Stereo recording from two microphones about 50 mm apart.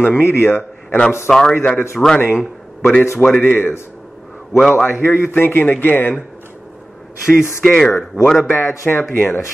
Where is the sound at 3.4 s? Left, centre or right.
Left.